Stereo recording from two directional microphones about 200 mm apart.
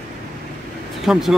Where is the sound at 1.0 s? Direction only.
Centre (ahead or behind).